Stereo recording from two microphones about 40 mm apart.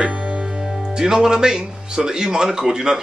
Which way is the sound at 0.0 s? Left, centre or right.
Right.